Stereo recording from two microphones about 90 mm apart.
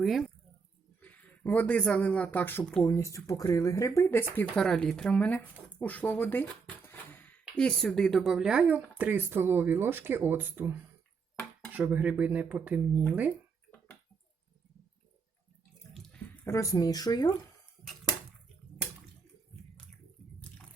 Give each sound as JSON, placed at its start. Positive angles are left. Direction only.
{"t": 0.0, "sound": "speech", "side_deg": 0}
{"t": 1.0, "sound": "speech", "side_deg": 15}
{"t": 2.8, "sound": "speech", "side_deg": 35}
{"t": 4.5, "sound": "speech", "side_deg": 5}
{"t": 7.5, "sound": "speech", "side_deg": 5}
{"t": 16.5, "sound": "speech", "side_deg": 40}